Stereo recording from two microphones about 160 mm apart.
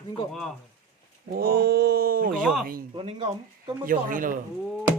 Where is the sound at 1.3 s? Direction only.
70° right (ahead or behind).